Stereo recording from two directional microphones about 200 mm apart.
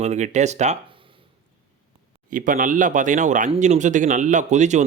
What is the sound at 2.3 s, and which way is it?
Speech, 40° right (ahead or behind).